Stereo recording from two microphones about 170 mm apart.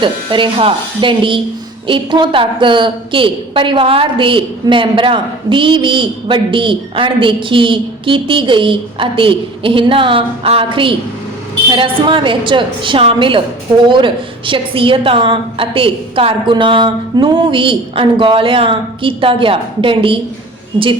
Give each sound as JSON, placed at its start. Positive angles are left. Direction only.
{"t": 0.0, "sound": "a woman's voice", "side_deg": -30}